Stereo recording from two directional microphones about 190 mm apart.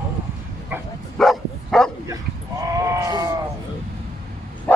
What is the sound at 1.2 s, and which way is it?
Bow-wow, centre (ahead or behind).